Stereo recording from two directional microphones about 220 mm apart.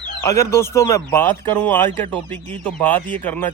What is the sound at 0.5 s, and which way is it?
Speech, 10° left (ahead or behind).